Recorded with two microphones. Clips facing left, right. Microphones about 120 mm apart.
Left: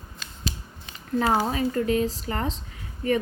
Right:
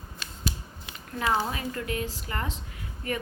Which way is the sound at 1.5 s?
35° left (ahead or behind).